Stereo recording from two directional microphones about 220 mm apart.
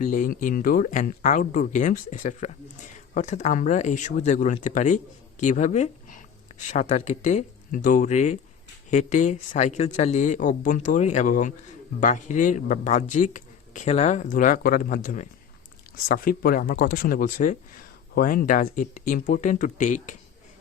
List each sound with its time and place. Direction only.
0.0 s speech: 35° left (ahead or behind)